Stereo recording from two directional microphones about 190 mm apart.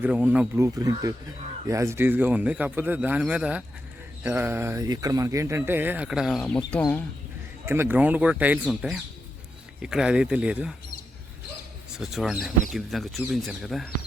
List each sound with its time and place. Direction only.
0.0 s speech: 10° right (ahead or behind)
7.6 s speech: 10° right (ahead or behind)
11.9 s speech: centre (ahead or behind)